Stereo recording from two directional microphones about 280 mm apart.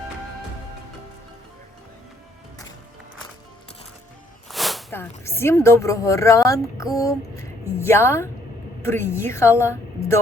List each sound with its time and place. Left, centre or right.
4.4 s a woman's voice: centre